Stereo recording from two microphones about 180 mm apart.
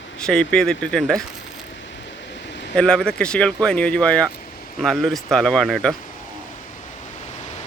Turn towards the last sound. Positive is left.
turn(degrees=5)  # may be behind; listen again after turning